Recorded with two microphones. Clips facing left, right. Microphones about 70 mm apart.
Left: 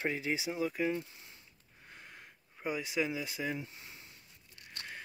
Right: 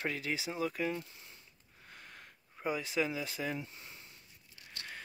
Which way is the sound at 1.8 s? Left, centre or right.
Centre.